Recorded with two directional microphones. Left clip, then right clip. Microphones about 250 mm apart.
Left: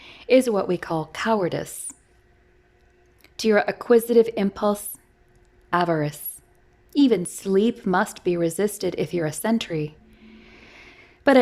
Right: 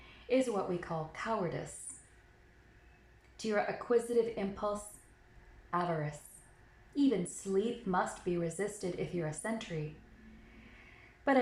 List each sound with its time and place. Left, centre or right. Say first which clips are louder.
0.3 s a woman's voice: left 13 dB; left
3.3 s a woman's voice: left 14 dB; left
11.3 s a woman's voice: left 13 dB; left